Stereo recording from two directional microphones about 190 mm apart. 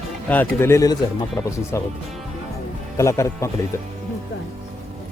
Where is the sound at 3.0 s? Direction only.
15° left (ahead or behind).